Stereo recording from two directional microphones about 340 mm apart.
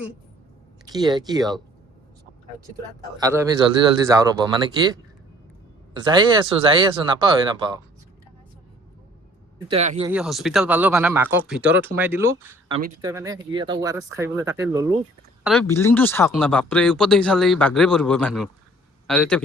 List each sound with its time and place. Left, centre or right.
0.9 s speech: centre
3.2 s speech: centre
5.9 s speech: centre
9.6 s speech: centre
10.1 s speech: centre
15.4 s a man's voice: centre